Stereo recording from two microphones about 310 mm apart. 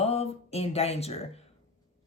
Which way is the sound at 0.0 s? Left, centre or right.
Centre.